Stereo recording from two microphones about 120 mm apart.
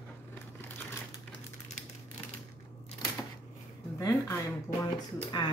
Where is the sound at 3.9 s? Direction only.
25° left (ahead or behind).